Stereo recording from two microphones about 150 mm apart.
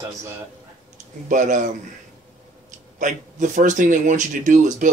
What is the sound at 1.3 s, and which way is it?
Speech, 55° right (ahead or behind).